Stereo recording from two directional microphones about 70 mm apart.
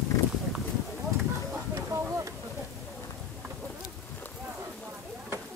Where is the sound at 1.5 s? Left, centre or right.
Right.